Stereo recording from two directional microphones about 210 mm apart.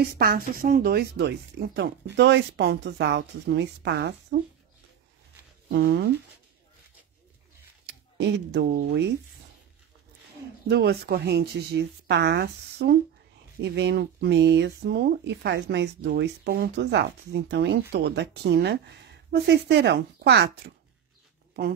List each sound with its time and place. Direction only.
0.0 s speech: 45° right (ahead or behind)
5.7 s speech: 50° right (ahead or behind)
7.8 s speech: 55° right (ahead or behind)
10.7 s speech: 50° right (ahead or behind)